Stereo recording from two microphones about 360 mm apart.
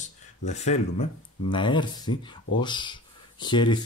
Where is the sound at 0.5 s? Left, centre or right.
Centre.